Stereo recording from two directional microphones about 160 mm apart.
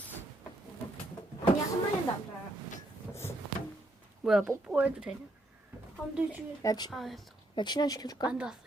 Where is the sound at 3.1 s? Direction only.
15° left (ahead or behind).